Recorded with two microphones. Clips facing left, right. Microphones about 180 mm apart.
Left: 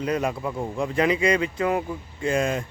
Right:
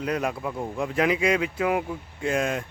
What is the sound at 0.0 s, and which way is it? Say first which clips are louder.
Speech: left 2 dB; centre (ahead or behind).